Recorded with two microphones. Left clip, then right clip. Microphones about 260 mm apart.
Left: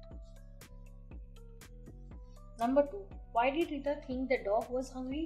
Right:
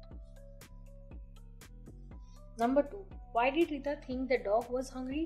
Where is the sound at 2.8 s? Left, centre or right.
Centre.